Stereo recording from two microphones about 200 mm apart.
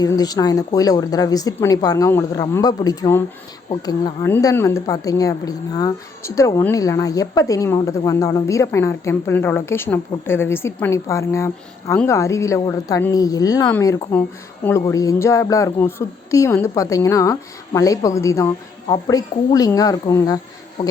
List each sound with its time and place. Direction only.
0.0 s a woman's voice: 20° left (ahead or behind)